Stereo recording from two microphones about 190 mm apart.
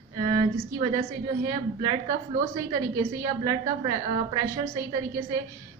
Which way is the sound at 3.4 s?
15° right (ahead or behind).